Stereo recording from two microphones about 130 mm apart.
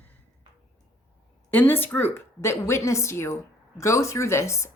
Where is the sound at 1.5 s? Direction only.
15° left (ahead or behind).